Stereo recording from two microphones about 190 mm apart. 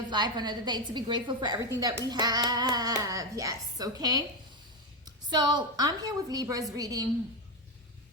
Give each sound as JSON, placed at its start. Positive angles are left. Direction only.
{"t": 0.1, "sound": "a woman's voice", "side_deg": -20}